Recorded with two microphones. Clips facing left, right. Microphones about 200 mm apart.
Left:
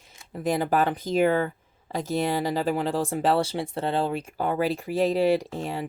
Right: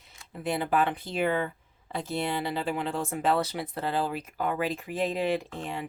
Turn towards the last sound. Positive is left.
turn(degrees=35)  # may be behind; listen again after turning